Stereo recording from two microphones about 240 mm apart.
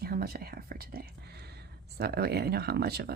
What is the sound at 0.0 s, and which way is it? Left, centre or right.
Whispering, right.